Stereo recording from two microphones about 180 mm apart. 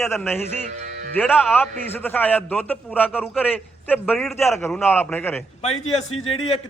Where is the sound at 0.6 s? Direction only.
45° right (ahead or behind).